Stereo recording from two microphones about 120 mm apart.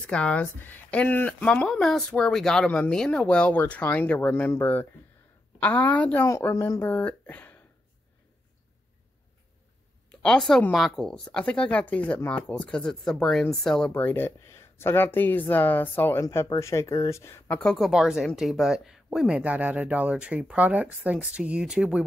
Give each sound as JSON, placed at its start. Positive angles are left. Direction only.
{"t": 0.0, "sound": "speech", "side_deg": 10}
{"t": 6.2, "sound": "speech", "side_deg": 25}
{"t": 10.2, "sound": "speech", "side_deg": 5}
{"t": 13.9, "sound": "speech", "side_deg": 15}